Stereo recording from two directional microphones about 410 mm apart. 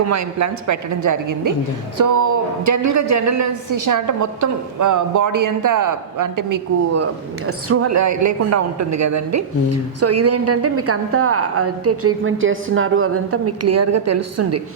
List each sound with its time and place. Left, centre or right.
0.1 s a woman's voice: right